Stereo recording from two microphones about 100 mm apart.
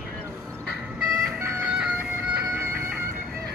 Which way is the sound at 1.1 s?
5° right (ahead or behind).